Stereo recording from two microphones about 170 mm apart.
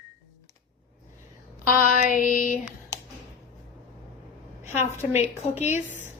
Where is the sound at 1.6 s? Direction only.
55° left (ahead or behind).